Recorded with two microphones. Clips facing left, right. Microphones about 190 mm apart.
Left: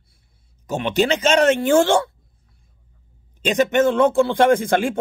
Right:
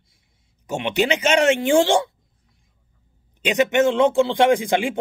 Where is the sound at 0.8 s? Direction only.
15° right (ahead or behind).